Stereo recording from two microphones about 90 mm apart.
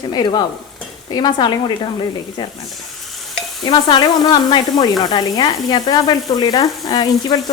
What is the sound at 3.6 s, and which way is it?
A woman's voice, 60° left (ahead or behind).